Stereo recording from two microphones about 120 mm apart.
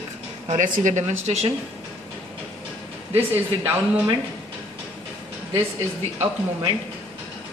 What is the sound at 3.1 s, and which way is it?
Speech, 15° right (ahead or behind).